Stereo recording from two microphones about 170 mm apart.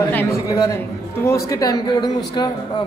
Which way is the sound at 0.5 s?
20° left (ahead or behind).